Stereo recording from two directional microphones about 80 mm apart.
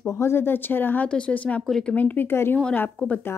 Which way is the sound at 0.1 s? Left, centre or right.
Left.